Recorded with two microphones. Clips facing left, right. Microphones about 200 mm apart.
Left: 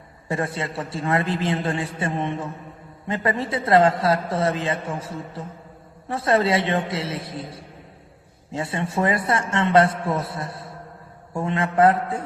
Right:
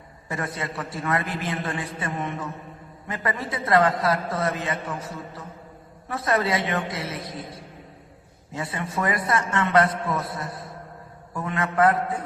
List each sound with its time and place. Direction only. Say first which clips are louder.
0.3 s a man's voice: left 4 dB; 30° left (ahead or behind)